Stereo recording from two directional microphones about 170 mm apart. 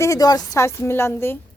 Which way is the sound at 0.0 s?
20° left (ahead or behind).